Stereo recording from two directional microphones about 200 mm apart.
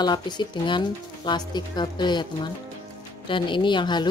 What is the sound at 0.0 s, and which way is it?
Speech, 20° left (ahead or behind).